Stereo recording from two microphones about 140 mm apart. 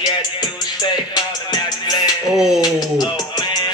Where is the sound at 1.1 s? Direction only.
30° left (ahead or behind).